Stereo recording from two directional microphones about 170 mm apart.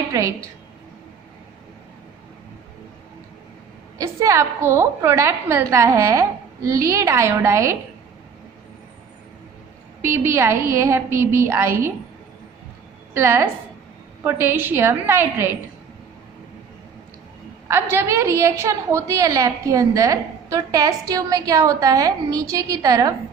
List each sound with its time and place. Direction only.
0.1 s a woman's voice: 20° right (ahead or behind)
4.0 s a woman's voice: 20° right (ahead or behind)
10.0 s a woman's voice: 15° right (ahead or behind)
13.1 s a woman's voice: 15° right (ahead or behind)
17.7 s a woman's voice: 15° right (ahead or behind)